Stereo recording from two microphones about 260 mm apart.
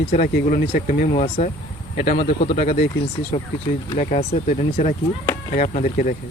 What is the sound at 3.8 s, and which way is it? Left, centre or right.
Speech, left.